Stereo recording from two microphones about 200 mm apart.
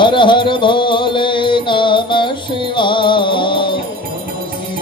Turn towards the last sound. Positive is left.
turn(degrees=25)  # may be behind; listen again after turning